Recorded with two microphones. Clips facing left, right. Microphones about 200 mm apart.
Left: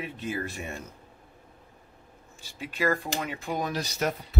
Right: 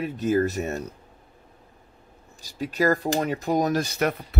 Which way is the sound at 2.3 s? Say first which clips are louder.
Right 7 dB; 40° right (ahead or behind).